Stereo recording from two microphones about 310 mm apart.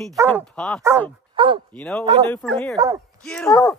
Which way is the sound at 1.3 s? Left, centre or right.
Centre.